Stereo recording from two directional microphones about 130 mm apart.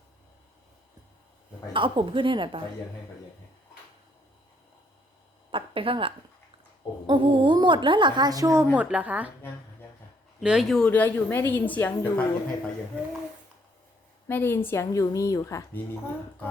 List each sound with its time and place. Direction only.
1.7 s a woman's voice: 40° right (ahead or behind)
5.5 s a woman's voice: 45° right (ahead or behind); by 8.6 s 25° right (ahead or behind)
8.7 s a woman's voice: 10° right (ahead or behind)
10.4 s a woman's voice: 5° right (ahead or behind); by 12.2 s 15° left (ahead or behind)
14.3 s a woman's voice: 15° left (ahead or behind)